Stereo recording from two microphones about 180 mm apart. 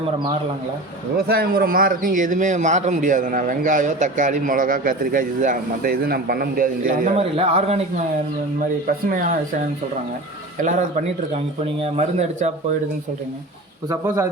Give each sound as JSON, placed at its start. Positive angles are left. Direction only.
{"t": 1.1, "sound": "a man's voice", "side_deg": -60}
{"t": 7.2, "sound": "speech", "side_deg": -35}
{"t": 9.0, "sound": "a man's voice", "side_deg": -50}
{"t": 13.8, "sound": "speech", "side_deg": -20}